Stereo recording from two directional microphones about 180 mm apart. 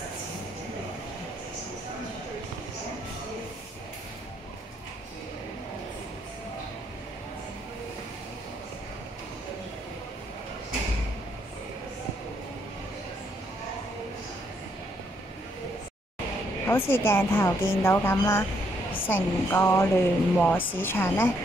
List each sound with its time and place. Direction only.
16.6 s speech: 10° left (ahead or behind)